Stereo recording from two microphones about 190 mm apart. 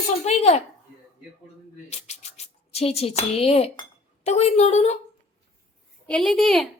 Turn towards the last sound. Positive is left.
turn(degrees=0)  # may be behind; listen again after turning